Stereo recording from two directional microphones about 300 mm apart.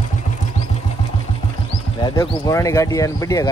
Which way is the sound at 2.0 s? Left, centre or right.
Centre.